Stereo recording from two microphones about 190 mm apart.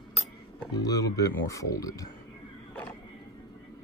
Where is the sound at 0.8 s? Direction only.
20° left (ahead or behind).